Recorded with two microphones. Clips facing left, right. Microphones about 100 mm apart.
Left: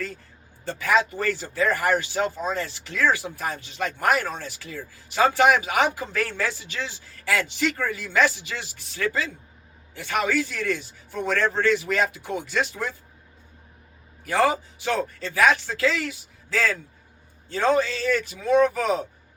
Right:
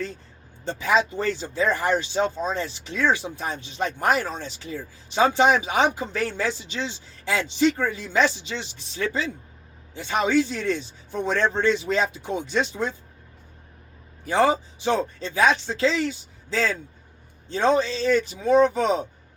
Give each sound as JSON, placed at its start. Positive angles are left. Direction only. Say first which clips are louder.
{"t": 0.6, "sound": "speech", "louder": "even", "side_deg": -20}
{"t": 14.3, "sound": "speech", "louder": "right 1 dB", "side_deg": -20}